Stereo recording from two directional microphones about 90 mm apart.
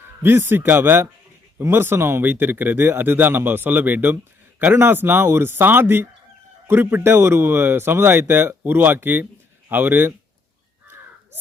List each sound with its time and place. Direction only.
0.2 s speech: 25° right (ahead or behind)